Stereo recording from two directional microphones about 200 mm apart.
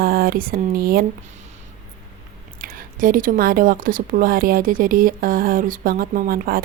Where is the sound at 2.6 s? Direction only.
45° right (ahead or behind).